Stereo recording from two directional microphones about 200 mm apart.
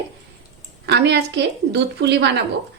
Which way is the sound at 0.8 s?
55° right (ahead or behind).